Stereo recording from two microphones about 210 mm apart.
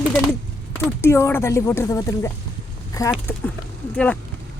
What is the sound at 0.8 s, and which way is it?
Speech, 15° left (ahead or behind).